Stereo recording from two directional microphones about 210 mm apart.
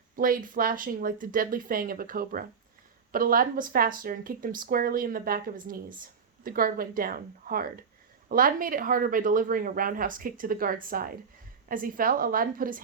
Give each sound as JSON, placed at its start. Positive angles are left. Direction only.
{"t": 0.2, "sound": "speech", "side_deg": -40}